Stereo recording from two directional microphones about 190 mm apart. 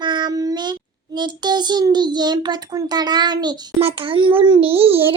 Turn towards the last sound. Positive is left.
turn(degrees=-30)  # may be behind; listen again after turning